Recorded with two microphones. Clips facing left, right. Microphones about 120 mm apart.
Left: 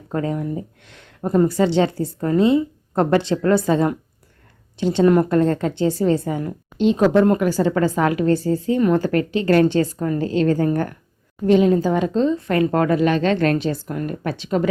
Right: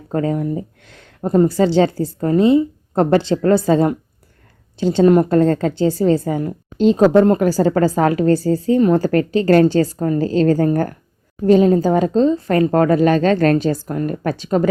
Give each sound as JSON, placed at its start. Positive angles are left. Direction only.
{"t": 0.1, "sound": "a woman's voice", "side_deg": -40}
{"t": 5.4, "sound": "a woman's voice", "side_deg": -35}